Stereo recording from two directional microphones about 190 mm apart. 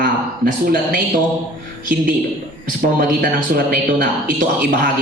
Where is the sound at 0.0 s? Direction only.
50° right (ahead or behind).